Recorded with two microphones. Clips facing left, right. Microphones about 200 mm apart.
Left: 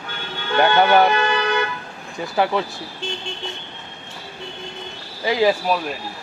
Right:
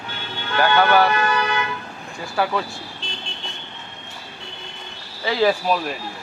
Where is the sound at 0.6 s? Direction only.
25° left (ahead or behind).